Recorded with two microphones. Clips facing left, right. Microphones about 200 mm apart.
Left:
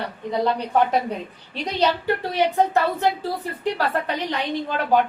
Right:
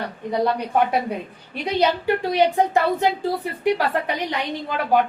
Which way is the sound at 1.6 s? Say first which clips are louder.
Right 2 dB; 10° right (ahead or behind).